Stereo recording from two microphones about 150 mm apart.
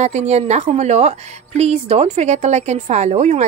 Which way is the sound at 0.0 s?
50° right (ahead or behind).